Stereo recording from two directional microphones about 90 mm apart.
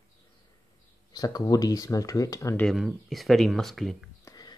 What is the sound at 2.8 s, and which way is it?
Speech, centre (ahead or behind).